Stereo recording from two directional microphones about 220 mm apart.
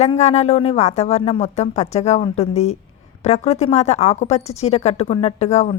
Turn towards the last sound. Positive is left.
turn(degrees=30)  # may be behind; listen again after turning